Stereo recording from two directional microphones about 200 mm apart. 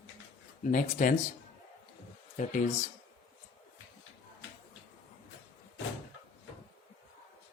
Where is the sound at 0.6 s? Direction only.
40° left (ahead or behind).